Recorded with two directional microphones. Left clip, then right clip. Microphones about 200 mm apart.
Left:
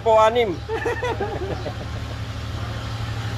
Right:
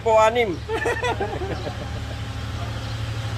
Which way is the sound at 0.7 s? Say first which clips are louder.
Right 3 dB; 45° right (ahead or behind).